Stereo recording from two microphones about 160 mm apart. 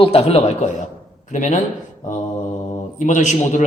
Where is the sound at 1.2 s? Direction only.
50° left (ahead or behind).